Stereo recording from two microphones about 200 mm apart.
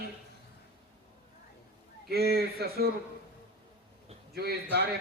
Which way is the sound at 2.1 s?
50° right (ahead or behind).